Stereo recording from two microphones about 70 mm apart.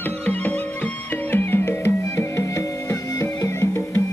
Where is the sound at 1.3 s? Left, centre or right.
Left.